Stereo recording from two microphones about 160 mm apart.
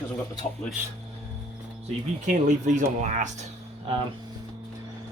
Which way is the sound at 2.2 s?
50° right (ahead or behind).